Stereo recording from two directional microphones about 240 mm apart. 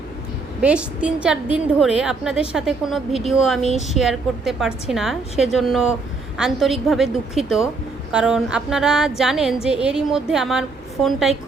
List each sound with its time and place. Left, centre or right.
0.6 s a woman's voice: centre
3.6 s speech: left
3.9 s a woman's voice: centre